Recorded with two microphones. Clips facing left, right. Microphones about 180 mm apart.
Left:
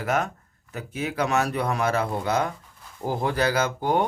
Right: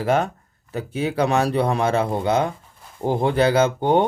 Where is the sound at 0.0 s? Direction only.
30° right (ahead or behind).